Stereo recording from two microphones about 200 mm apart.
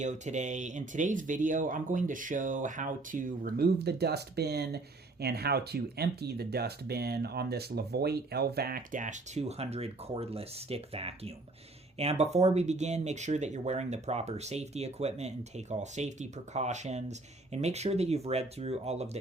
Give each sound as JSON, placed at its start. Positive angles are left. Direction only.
{"t": 0.0, "sound": "speech", "side_deg": -35}